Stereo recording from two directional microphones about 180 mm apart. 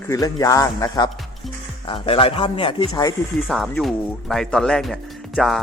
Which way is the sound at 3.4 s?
Centre (ahead or behind).